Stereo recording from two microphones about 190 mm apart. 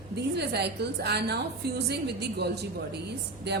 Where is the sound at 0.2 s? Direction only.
60° right (ahead or behind).